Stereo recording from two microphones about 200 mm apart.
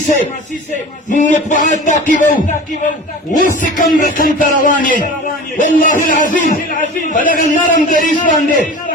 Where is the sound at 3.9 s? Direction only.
40° left (ahead or behind).